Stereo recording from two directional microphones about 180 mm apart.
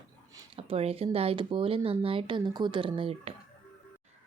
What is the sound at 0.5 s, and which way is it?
A woman's voice, 35° right (ahead or behind).